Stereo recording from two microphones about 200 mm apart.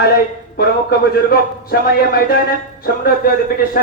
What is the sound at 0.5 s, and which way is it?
Speech, 50° left (ahead or behind).